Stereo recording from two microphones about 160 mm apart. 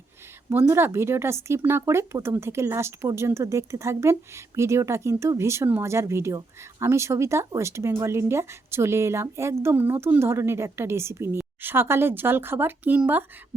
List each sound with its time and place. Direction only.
0.5 s speech: 15° right (ahead or behind)